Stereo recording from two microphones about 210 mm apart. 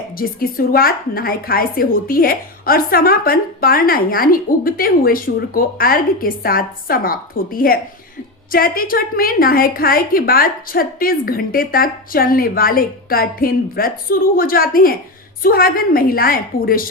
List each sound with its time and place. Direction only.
0.2 s a woman's voice: 45° left (ahead or behind)